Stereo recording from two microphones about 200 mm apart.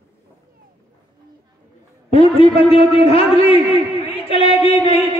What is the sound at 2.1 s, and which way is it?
A man's voice, 30° left (ahead or behind).